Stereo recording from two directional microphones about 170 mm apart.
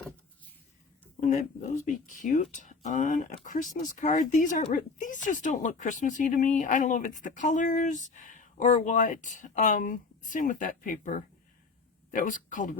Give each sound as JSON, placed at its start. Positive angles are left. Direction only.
{"t": 1.2, "sound": "speech", "side_deg": 50}